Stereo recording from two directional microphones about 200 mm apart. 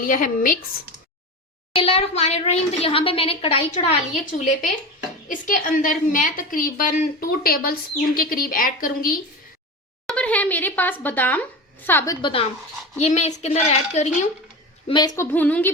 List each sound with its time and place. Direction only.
0.0 s a woman's voice: 45° left (ahead or behind)
1.8 s a woman's voice: 30° left (ahead or behind); by 9.1 s 45° left (ahead or behind)
10.1 s a woman's voice: 5° left (ahead or behind)
12.2 s a woman's voice: 30° left (ahead or behind)
14.8 s a woman's voice: 20° left (ahead or behind)